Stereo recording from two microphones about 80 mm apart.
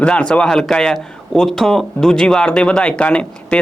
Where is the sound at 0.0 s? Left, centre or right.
Centre.